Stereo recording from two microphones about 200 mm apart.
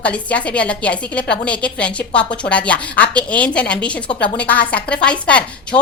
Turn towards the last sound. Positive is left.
turn(degrees=5)  # may be behind; listen again after turning